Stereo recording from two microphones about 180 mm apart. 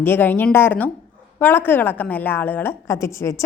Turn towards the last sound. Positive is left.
turn(degrees=15)  # may be behind; listen again after turning